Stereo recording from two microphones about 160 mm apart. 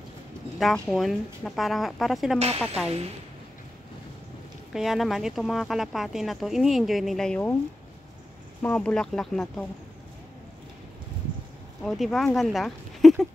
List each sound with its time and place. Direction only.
0.6 s speech: centre (ahead or behind)
2.3 s speech: 40° right (ahead or behind)
4.7 s speech: centre (ahead or behind)
8.6 s speech: 5° left (ahead or behind)
11.8 s speech: centre (ahead or behind)
12.4 s a sound: centre (ahead or behind)